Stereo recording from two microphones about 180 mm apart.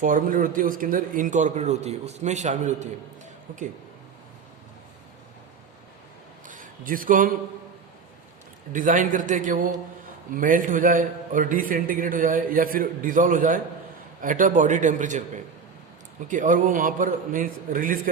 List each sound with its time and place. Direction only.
0.0 s a man's voice: 50° right (ahead or behind)
6.5 s speech: 50° right (ahead or behind)
8.7 s a man's voice: 45° right (ahead or behind)
16.3 s a man's voice: 45° right (ahead or behind)